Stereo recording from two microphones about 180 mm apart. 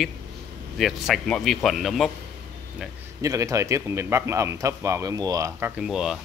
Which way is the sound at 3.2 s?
15° right (ahead or behind).